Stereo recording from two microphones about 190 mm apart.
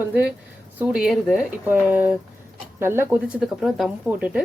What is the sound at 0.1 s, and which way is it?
A woman's voice, 5° right (ahead or behind).